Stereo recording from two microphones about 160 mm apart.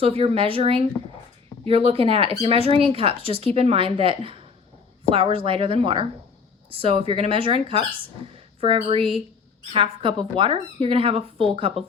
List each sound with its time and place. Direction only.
0.0 s speech: 35° right (ahead or behind)